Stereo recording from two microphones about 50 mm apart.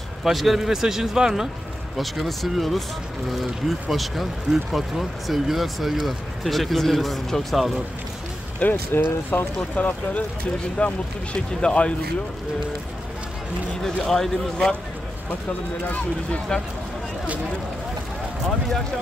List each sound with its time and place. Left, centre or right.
0.2 s speech: centre
8.6 s speech: left
8.9 s speech: left
9.8 s speech: left
14.0 s speech: centre